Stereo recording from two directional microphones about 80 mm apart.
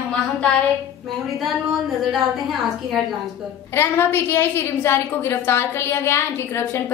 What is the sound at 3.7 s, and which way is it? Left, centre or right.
A woman's voice, left.